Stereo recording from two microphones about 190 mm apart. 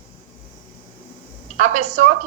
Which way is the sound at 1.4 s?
40° right (ahead or behind).